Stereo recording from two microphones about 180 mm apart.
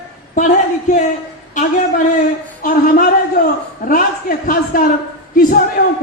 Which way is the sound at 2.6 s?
50° left (ahead or behind).